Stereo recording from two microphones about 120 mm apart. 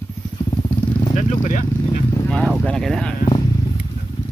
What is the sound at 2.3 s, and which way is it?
Speech, 5° left (ahead or behind).